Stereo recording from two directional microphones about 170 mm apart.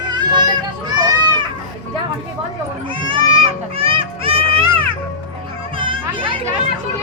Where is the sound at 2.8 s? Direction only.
30° right (ahead or behind).